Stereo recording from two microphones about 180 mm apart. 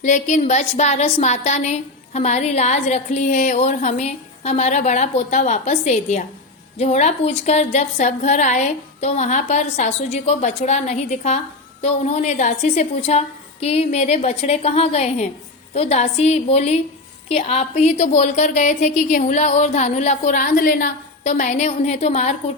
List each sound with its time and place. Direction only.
0.0 s a woman's voice: 45° left (ahead or behind)